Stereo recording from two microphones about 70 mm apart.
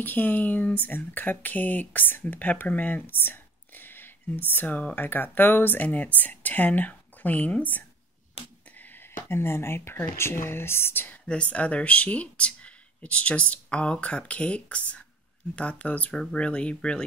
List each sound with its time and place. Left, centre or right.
0.0 s speech: left
11.5 s speech: centre